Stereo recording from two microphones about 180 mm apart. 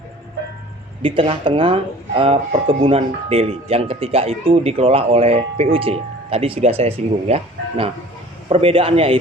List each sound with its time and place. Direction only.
1.0 s speech: 30° right (ahead or behind)